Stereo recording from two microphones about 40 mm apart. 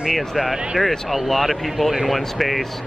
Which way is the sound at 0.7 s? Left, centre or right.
Centre.